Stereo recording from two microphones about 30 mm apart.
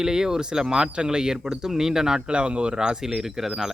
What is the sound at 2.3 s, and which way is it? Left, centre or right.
Speech, right.